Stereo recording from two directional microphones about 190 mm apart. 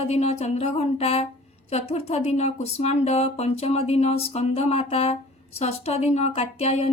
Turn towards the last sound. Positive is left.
turn(degrees=35)  # may be behind; listen again after turning